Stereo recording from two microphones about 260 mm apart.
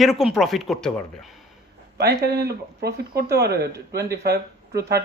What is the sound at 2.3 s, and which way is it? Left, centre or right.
Speech, right.